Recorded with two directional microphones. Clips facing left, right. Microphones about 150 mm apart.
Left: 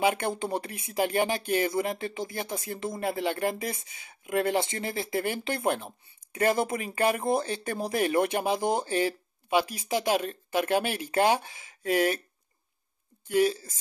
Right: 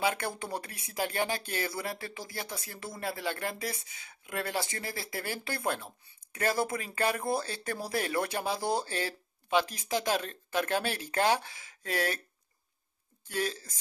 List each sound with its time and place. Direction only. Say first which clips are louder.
0.0 s speech: left 5 dB; 20° left (ahead or behind)
13.3 s speech: left 9 dB; 15° left (ahead or behind)